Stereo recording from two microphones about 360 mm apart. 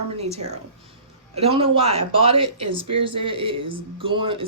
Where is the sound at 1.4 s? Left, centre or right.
Centre.